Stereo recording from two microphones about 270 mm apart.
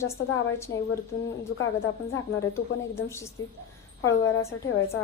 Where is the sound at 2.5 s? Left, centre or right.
Centre.